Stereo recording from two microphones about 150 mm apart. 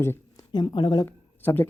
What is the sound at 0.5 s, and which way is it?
Speech, 30° left (ahead or behind).